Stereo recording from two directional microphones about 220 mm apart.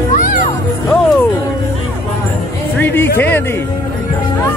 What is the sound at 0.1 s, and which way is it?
Music, 35° left (ahead or behind).